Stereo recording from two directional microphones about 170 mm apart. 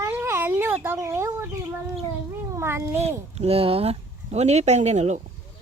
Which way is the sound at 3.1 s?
40° right (ahead or behind).